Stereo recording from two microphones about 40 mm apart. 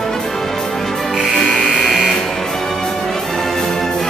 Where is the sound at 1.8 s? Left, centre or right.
Centre.